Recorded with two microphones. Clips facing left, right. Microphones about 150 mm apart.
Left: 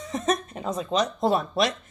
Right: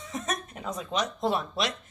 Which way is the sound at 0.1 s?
30° left (ahead or behind).